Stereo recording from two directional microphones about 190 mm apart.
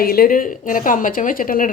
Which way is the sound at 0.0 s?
50° left (ahead or behind).